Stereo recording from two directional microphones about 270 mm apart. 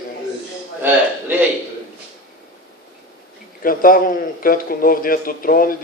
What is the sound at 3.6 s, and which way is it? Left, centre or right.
A man's voice, left.